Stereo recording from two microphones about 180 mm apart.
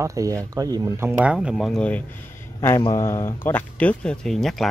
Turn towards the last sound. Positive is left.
turn(degrees=0)  # may be behind; listen again after turning